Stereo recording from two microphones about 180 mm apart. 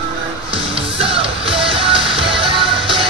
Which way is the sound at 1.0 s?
30° right (ahead or behind).